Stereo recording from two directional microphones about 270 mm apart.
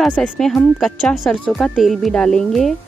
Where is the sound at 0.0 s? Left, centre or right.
Centre.